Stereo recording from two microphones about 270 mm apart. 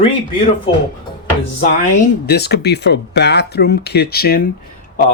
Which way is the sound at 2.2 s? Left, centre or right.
Left.